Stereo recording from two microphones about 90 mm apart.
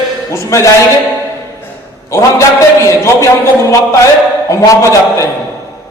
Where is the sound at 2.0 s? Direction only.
30° left (ahead or behind).